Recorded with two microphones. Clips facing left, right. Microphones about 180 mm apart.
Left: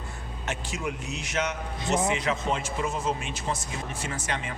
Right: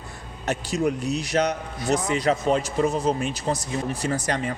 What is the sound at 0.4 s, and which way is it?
Speech, 40° right (ahead or behind).